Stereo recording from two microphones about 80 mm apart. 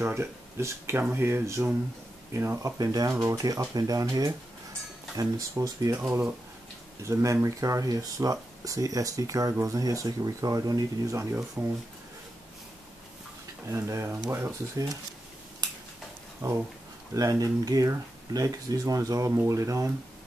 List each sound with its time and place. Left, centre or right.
0.0 s speech: right
2.6 s speech: right
5.9 s speech: right
11.6 s speech: right
13.7 s speech: right
16.4 s speech: right